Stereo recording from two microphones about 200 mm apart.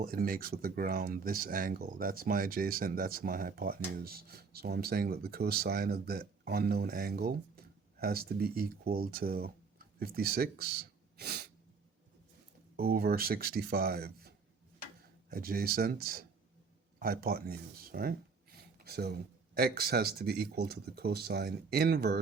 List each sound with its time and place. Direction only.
0.0 s speech: 45° right (ahead or behind)
12.7 s speech: 50° right (ahead or behind)
18.5 s a sound: 50° right (ahead or behind)
19.5 s speech: 50° right (ahead or behind)